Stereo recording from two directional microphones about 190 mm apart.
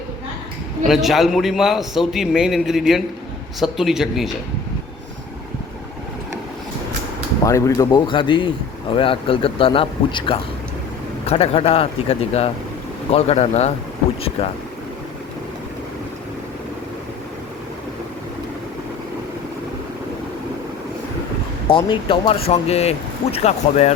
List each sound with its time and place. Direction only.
0.9 s a man's voice: centre (ahead or behind)
7.4 s speech: 15° left (ahead or behind); by 13.7 s 35° left (ahead or behind)
21.8 s speech: 25° left (ahead or behind)